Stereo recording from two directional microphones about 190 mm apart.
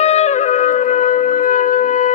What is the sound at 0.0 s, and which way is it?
Shofar, 35° left (ahead or behind).